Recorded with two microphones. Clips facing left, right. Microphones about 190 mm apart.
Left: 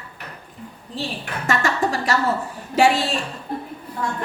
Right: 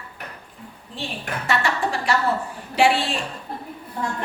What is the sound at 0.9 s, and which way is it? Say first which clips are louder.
A woman's voice: left 2 dB; 40° left (ahead or behind).